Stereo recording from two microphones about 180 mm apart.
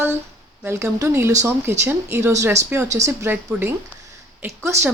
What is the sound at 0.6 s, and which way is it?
Speech, 15° right (ahead or behind).